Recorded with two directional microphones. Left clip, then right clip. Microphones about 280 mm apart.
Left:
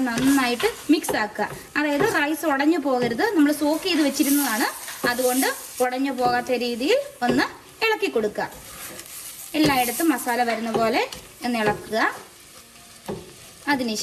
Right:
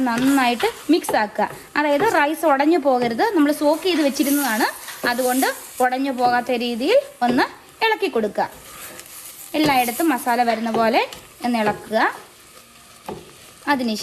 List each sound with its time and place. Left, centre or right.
0.0 s a woman's voice: right
9.5 s a woman's voice: right
13.7 s a woman's voice: right